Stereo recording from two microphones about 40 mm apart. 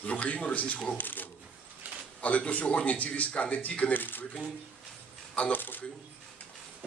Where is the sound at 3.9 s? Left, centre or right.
Left.